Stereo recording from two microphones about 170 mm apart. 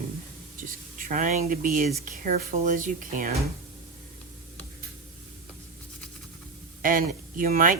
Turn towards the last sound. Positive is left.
turn(degrees=-55)  # may be behind; listen again after turning